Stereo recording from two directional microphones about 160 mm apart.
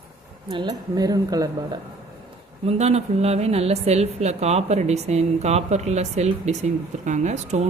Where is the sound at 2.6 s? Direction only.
45° right (ahead or behind).